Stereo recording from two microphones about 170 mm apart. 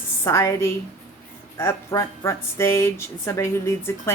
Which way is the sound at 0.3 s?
15° left (ahead or behind).